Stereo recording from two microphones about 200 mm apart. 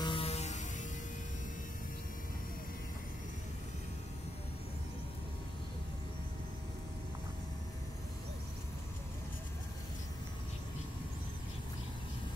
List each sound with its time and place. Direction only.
0.0 s music: 25° left (ahead or behind)